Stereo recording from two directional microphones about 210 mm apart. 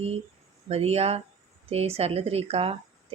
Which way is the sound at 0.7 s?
30° right (ahead or behind).